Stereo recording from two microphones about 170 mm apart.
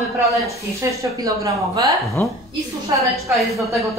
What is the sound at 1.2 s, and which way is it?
Speech, 20° right (ahead or behind).